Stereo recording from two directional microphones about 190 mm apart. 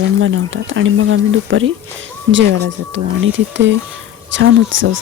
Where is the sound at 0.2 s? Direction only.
85° right.